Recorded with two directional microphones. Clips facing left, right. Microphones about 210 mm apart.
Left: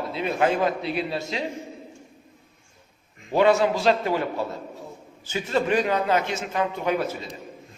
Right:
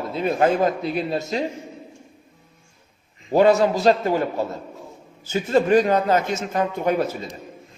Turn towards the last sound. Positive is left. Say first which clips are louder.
# right 3 dB
turn(degrees=-45)  # may be behind; listen again after turning